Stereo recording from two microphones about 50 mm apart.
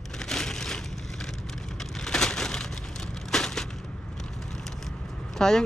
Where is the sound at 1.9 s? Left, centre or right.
Centre.